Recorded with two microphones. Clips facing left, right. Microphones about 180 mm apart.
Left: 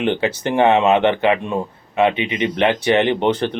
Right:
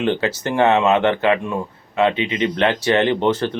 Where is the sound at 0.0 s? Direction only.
15° left (ahead or behind).